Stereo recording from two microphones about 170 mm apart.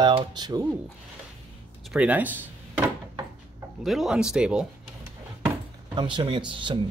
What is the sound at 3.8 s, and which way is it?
Speech, centre (ahead or behind).